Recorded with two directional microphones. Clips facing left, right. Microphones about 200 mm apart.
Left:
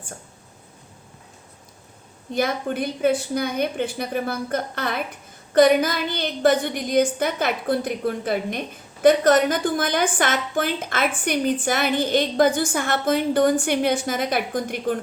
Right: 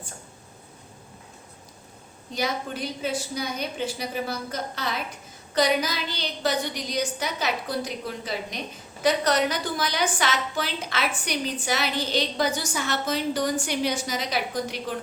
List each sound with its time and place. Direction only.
2.3 s a woman's voice: 55° left (ahead or behind)